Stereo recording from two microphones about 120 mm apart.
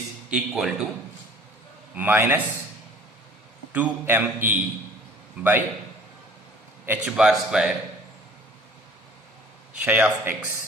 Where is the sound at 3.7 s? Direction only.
15° right (ahead or behind).